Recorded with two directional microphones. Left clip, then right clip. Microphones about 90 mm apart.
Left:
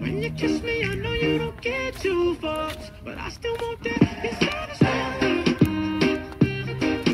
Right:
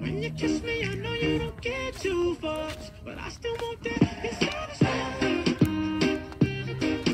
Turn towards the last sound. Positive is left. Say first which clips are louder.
# left 4 dB
turn(degrees=45)  # may be behind; listen again after turning